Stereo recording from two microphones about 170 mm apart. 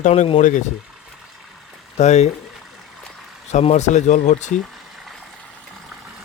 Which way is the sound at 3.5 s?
45° left (ahead or behind).